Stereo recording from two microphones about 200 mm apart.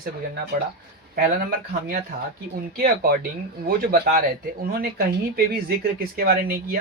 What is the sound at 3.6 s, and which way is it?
Speech, 50° right (ahead or behind).